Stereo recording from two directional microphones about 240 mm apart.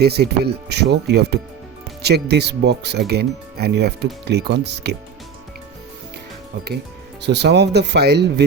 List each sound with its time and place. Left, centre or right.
0.0 s speech: right
7.2 s speech: right